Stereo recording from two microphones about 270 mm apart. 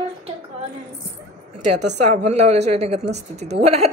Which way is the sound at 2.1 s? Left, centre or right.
Right.